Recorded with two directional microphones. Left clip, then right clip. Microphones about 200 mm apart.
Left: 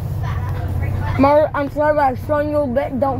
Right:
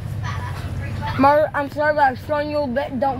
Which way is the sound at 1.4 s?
25° right (ahead or behind).